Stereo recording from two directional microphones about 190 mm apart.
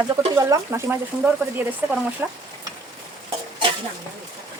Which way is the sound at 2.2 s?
10° right (ahead or behind).